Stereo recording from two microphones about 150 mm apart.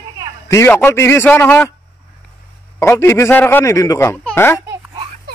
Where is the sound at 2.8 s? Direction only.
15° left (ahead or behind).